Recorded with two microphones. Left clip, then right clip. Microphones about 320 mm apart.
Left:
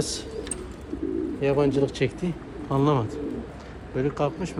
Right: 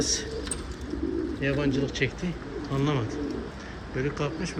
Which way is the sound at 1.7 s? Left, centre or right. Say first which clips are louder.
Left 4 dB; left.